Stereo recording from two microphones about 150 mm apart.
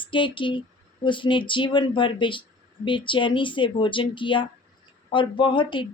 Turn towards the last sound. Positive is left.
turn(degrees=35)  # may be behind; listen again after turning